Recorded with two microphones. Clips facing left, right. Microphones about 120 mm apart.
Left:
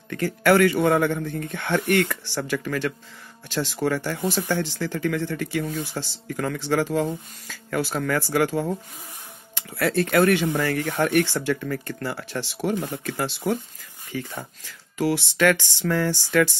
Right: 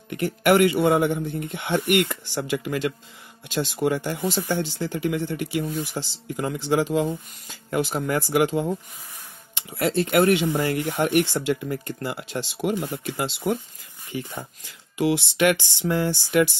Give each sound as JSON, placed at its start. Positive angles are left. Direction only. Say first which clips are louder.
{"t": 0.1, "sound": "speech", "louder": "even", "side_deg": -20}